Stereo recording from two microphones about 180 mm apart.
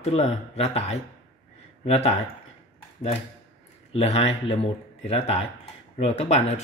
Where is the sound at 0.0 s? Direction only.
40° left (ahead or behind).